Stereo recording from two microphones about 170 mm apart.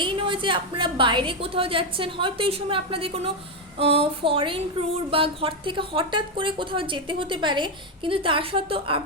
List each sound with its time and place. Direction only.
0.0 s a woman's voice: 30° right (ahead or behind)